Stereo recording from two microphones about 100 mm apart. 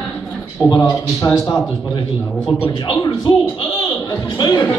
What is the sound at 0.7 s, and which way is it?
Speech, 35° left (ahead or behind).